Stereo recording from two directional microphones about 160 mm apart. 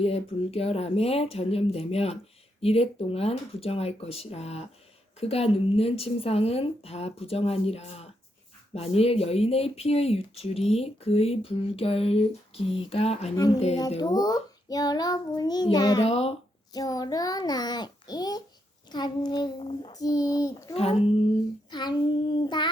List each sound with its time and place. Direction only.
0.0 s speech: 40° left (ahead or behind)
14.0 s a child's voice: 25° left (ahead or behind)
16.0 s speech: 40° left (ahead or behind)
16.7 s a child's voice: 25° left (ahead or behind)
19.9 s a child's voice: 20° left (ahead or behind)
20.7 s speech: 40° left (ahead or behind)
21.7 s a child's voice: 25° left (ahead or behind)